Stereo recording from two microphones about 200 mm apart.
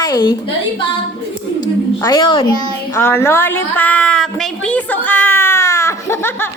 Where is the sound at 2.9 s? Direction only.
10° left (ahead or behind).